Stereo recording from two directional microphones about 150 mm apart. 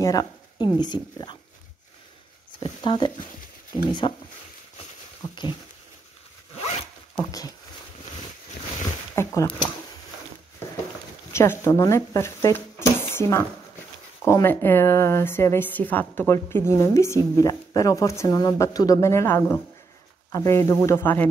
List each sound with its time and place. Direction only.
0.0 s speech: 25° left (ahead or behind)
2.6 s speech: 30° left (ahead or behind)
5.3 s speech: 30° left (ahead or behind)
7.2 s speech: 25° left (ahead or behind)
9.1 s speech: 20° left (ahead or behind)
11.3 s a woman's voice: 15° left (ahead or behind)